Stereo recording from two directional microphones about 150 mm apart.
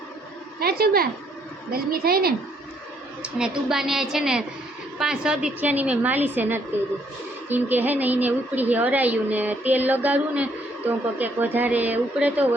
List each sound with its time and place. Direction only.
0.6 s a woman's voice: 90° right
3.2 s a woman's voice: 5° right (ahead or behind)